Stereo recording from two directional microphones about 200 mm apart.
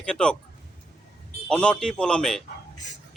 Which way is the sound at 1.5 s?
5° left (ahead or behind).